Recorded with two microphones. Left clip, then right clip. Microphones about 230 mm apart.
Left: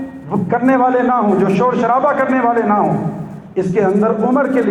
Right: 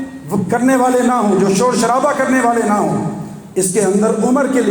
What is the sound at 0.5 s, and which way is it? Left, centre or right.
A man's voice, right.